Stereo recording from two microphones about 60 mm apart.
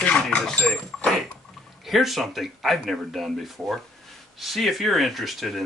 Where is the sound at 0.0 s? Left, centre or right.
Left.